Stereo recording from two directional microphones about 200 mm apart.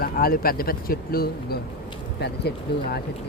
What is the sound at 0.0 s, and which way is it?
Speech, 50° left (ahead or behind).